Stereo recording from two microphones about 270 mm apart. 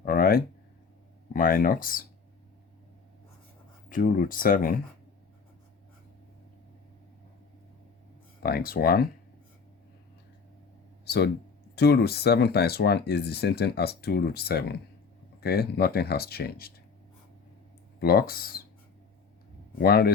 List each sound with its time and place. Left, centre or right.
0.0 s a sound: left
1.3 s speech: left
3.8 s speech: left
8.4 s speech: left
11.0 s a sound: left
11.7 s speech: left
18.0 s speech: left
19.8 s speech: left